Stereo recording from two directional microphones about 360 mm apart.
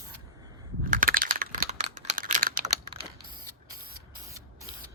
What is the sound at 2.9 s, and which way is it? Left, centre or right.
Typing, centre.